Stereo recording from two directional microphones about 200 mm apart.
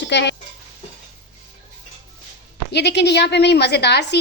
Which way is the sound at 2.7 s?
55° left (ahead or behind).